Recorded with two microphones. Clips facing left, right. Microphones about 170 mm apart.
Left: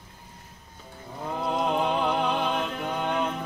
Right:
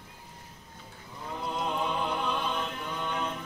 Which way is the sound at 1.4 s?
70° left (ahead or behind).